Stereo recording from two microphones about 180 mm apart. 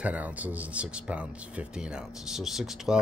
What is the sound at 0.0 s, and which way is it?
Speech, 10° right (ahead or behind).